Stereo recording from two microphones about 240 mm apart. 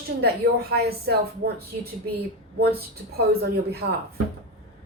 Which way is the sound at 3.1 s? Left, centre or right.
Right.